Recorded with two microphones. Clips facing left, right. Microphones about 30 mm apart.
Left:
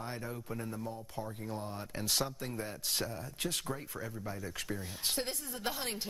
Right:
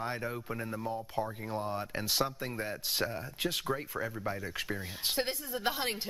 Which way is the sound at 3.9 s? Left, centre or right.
Right.